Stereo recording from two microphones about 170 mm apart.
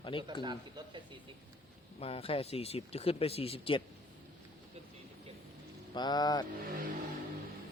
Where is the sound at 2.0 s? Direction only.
35° left (ahead or behind).